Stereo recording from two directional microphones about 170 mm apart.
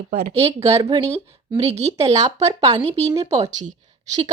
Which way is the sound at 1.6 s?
40° right (ahead or behind).